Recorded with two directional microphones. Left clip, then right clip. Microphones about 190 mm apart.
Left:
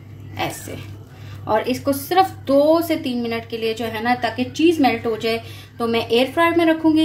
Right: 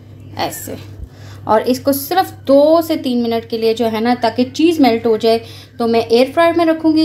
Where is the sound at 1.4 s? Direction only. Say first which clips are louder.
Right 6 dB; 30° right (ahead or behind).